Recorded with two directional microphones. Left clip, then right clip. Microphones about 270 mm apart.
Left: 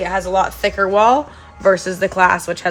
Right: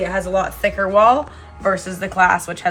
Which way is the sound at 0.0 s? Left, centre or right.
Left.